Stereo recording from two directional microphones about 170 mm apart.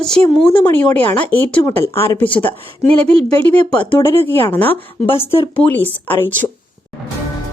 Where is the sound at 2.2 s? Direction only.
30° left (ahead or behind).